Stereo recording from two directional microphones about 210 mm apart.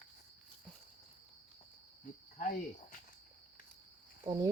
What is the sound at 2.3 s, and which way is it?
Cricket, 35° left (ahead or behind).